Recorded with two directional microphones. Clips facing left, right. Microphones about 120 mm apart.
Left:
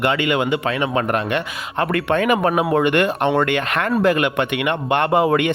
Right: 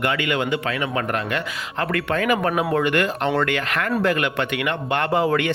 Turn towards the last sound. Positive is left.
turn(degrees=20)  # may be behind; listen again after turning